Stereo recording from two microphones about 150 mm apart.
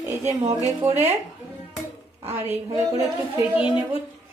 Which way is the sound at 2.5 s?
20° right (ahead or behind).